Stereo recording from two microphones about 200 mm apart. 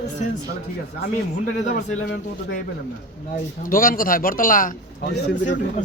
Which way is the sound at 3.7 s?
45° left (ahead or behind).